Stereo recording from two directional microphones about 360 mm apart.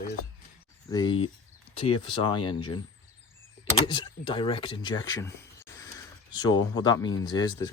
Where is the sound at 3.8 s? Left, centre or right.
Centre.